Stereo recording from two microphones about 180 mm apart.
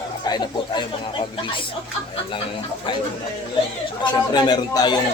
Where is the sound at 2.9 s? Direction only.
25° left (ahead or behind).